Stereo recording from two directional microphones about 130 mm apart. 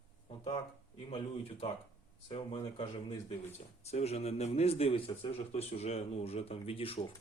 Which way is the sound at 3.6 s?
55° left (ahead or behind).